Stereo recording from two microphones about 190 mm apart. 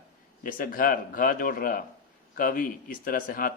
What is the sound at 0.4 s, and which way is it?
Speech, 45° left (ahead or behind).